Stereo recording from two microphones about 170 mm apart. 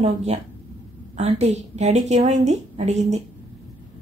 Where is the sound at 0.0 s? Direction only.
40° right (ahead or behind).